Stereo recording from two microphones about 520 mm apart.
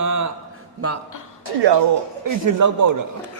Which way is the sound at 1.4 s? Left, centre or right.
Right.